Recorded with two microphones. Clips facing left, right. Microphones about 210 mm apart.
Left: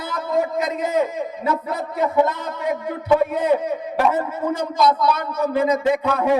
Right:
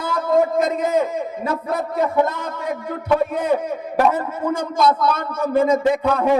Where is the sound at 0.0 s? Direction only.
50° right (ahead or behind).